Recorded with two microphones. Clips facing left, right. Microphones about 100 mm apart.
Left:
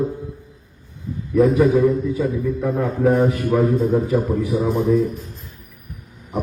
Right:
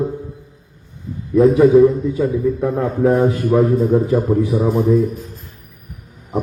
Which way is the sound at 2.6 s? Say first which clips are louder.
Right 2 dB; 25° right (ahead or behind).